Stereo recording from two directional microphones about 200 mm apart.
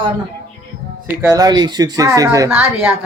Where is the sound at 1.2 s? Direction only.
15° right (ahead or behind).